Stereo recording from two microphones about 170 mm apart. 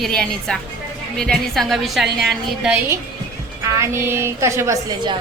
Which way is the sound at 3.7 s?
15° right (ahead or behind).